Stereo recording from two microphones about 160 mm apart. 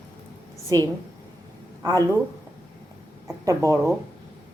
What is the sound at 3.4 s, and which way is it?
Speech, 20° right (ahead or behind).